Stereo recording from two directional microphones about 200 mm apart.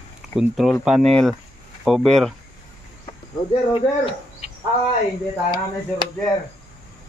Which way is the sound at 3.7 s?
25° left (ahead or behind).